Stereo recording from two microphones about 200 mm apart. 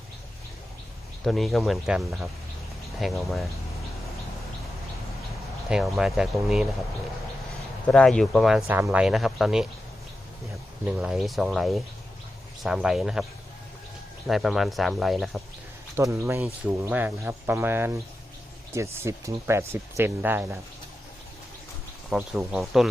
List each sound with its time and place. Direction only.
1.2 s speech: centre (ahead or behind)
5.6 s speech: centre (ahead or behind)
7.9 s speech: 5° left (ahead or behind)
10.8 s speech: 5° right (ahead or behind)
14.3 s speech: centre (ahead or behind)
16.0 s speech: 15° right (ahead or behind)
22.1 s speech: centre (ahead or behind)